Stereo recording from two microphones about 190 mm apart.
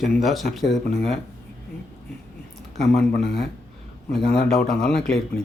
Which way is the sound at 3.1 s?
55° left (ahead or behind).